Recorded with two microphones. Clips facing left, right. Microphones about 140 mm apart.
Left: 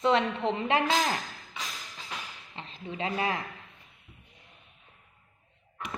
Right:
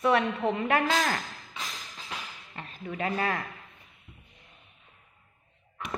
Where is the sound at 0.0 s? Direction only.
25° left (ahead or behind).